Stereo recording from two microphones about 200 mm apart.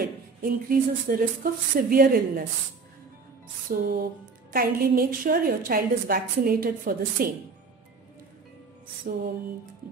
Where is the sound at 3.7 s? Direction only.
45° right (ahead or behind).